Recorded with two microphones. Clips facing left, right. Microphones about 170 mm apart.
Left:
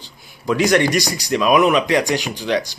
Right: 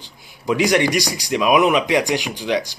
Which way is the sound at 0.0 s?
15° right (ahead or behind).